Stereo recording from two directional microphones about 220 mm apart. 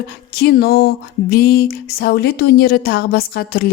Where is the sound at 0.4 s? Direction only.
45° left (ahead or behind).